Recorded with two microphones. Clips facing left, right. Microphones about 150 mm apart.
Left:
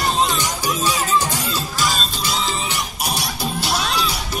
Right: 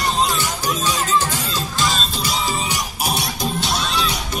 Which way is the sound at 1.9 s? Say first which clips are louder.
Right 1 dB; centre (ahead or behind).